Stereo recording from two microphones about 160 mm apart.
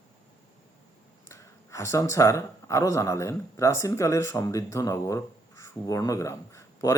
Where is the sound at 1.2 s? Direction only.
20° left (ahead or behind).